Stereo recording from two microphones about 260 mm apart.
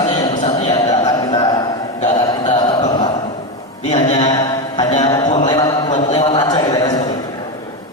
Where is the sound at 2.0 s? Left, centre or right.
Centre.